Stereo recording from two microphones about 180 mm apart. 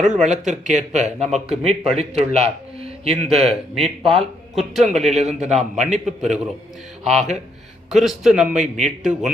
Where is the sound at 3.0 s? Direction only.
35° right (ahead or behind).